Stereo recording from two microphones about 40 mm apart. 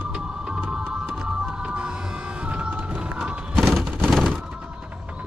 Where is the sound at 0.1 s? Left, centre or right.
Centre.